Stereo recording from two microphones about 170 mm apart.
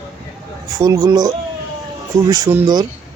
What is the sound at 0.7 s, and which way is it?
Speech, 20° right (ahead or behind).